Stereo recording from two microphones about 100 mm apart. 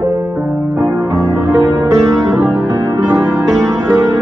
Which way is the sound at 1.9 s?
35° right (ahead or behind).